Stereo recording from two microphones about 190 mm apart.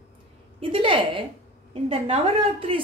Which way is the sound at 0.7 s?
25° right (ahead or behind).